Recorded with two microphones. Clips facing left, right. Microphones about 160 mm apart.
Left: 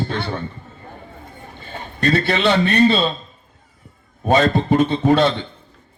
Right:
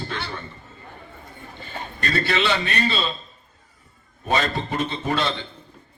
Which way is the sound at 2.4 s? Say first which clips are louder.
Left 9 dB; 55° left (ahead or behind).